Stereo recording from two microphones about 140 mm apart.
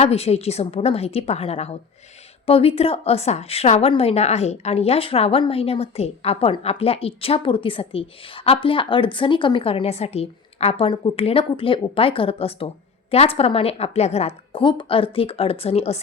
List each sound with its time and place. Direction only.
0.0 s a woman's voice: 50° left (ahead or behind)